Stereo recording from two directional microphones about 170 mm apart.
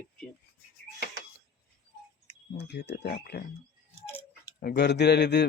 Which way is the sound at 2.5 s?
85° left.